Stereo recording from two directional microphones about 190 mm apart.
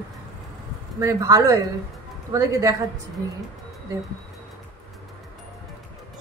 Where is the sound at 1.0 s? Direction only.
15° right (ahead or behind).